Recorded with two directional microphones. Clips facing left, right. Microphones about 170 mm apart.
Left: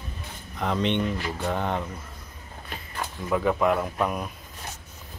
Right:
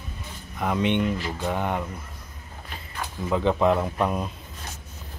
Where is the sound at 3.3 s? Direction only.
25° right (ahead or behind).